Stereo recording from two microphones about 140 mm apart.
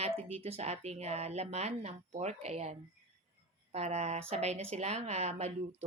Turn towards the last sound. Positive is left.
turn(degrees=-50)  # may be behind; listen again after turning